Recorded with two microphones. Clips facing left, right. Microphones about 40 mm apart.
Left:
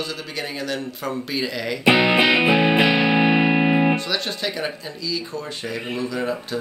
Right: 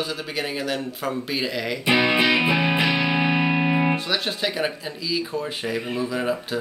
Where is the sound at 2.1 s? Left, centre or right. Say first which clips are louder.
Left 3 dB; left; by 4.0 s centre.